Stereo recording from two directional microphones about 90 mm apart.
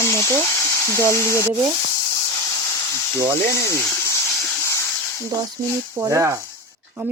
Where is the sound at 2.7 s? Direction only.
35° left (ahead or behind).